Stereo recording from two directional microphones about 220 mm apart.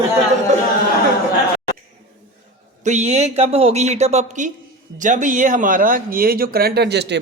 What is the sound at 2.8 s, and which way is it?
A woman's voice, 30° right (ahead or behind).